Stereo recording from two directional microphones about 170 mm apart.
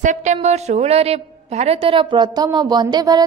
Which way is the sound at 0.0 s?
45° right (ahead or behind).